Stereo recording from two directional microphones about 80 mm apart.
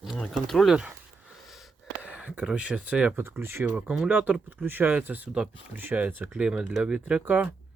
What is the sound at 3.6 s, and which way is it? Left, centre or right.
Speech, centre.